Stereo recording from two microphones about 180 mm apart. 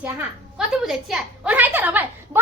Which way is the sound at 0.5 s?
Centre (ahead or behind).